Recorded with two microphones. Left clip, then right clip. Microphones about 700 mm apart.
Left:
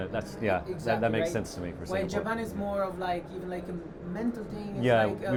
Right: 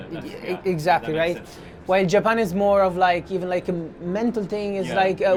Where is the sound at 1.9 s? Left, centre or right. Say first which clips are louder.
Right 13 dB; right.